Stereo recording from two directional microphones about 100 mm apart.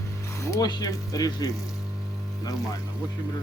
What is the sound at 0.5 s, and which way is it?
Speech, 40° left (ahead or behind).